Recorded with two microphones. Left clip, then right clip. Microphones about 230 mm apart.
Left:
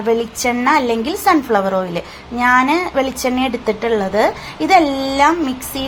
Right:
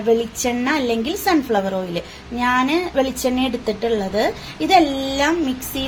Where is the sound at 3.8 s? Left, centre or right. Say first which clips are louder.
Left 4 dB; centre.